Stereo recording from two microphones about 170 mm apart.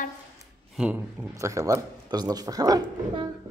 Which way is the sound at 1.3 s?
20° right (ahead or behind).